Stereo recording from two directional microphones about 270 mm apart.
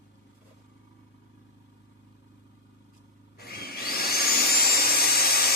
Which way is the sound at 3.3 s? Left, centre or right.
Left.